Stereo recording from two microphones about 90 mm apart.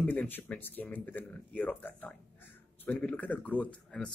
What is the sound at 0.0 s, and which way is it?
Speech, 20° left (ahead or behind).